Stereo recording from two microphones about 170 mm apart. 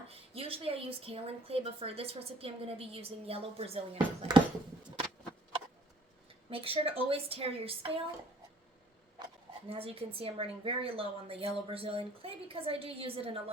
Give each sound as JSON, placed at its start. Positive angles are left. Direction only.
{"t": 0.1, "sound": "a woman's voice", "side_deg": -35}
{"t": 6.5, "sound": "a woman's voice", "side_deg": -35}
{"t": 9.6, "sound": "a woman's voice", "side_deg": -35}